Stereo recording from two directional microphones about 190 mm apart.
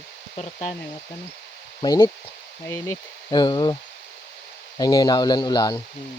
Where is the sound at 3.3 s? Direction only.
20° left (ahead or behind).